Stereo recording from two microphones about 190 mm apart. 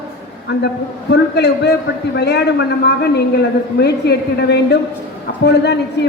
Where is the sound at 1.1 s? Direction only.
60° left (ahead or behind).